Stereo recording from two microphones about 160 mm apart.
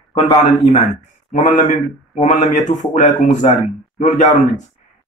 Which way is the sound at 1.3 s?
50° left (ahead or behind).